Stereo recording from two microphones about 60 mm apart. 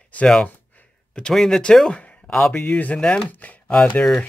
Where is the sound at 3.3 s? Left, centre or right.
Left.